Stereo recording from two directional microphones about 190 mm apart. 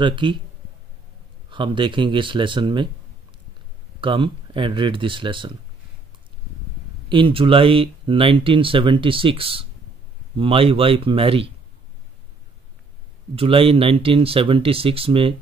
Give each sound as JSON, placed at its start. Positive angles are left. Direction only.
{"t": 0.0, "sound": "speech", "side_deg": -25}
{"t": 1.5, "sound": "speech", "side_deg": -25}
{"t": 4.0, "sound": "speech", "side_deg": -25}
{"t": 7.1, "sound": "speech", "side_deg": -25}
{"t": 13.3, "sound": "speech", "side_deg": -30}